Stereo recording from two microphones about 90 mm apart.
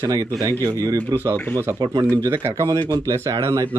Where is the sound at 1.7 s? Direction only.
55° right (ahead or behind).